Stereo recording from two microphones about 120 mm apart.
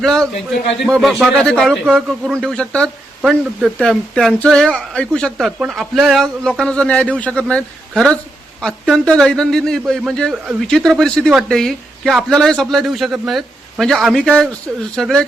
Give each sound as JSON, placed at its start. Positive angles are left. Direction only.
{"t": 0.0, "sound": "speech", "side_deg": 5}
{"t": 3.2, "sound": "speech", "side_deg": -5}
{"t": 3.8, "sound": "a man's voice", "side_deg": 5}